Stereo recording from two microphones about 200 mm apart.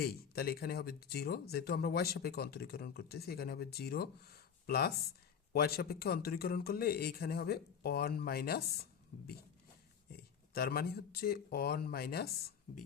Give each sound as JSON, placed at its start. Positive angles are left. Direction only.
{"t": 0.0, "sound": "speech", "side_deg": 50}